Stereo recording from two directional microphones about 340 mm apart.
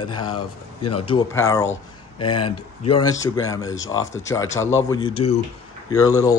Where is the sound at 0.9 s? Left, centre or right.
Centre.